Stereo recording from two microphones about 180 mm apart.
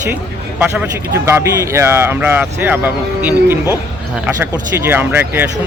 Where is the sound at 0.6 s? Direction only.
10° right (ahead or behind).